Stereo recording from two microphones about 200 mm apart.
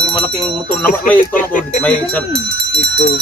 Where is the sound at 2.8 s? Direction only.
55° left (ahead or behind).